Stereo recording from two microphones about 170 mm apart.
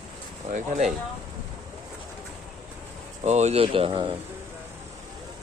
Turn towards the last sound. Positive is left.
turn(degrees=-30)  # may be behind; listen again after turning